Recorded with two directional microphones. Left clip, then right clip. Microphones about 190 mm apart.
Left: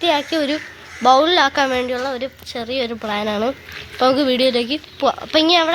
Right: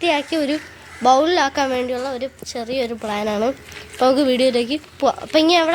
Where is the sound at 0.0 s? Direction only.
Centre (ahead or behind).